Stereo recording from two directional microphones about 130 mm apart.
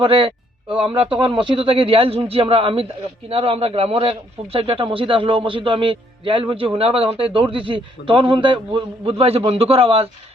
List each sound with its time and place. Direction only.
0.0 s a man's voice: 40° right (ahead or behind)